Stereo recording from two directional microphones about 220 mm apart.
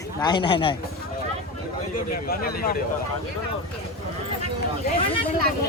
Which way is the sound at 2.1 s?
40° left (ahead or behind).